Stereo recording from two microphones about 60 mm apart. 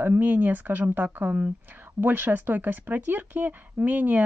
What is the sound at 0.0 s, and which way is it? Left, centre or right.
Speech, right.